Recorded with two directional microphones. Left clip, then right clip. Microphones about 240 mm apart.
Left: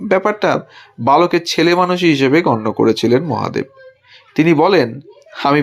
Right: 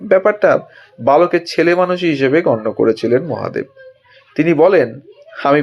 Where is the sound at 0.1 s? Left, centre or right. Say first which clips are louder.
Right 3 dB; left.